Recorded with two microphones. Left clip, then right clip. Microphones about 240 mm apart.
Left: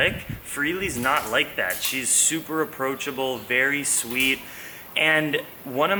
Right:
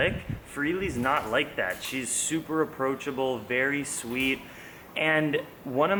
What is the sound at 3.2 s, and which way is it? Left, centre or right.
Speech, right.